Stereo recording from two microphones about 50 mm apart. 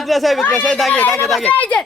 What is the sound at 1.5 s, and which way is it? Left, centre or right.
Speech, left.